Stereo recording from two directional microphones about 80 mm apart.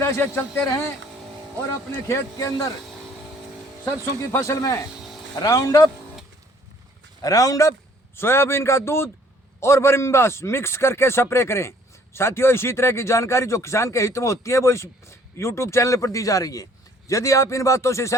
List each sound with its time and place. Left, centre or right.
0.0 s a man's voice: left
0.6 s a man's voice: left
2.0 s a man's voice: left
4.2 s a man's voice: left
7.2 s a man's voice: left